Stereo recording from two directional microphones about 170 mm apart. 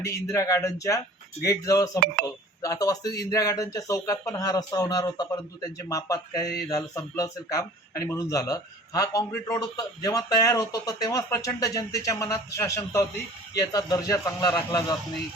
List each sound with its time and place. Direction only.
0.0 s speech: 20° left (ahead or behind)